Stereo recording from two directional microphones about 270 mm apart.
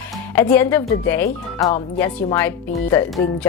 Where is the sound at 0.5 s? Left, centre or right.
Centre.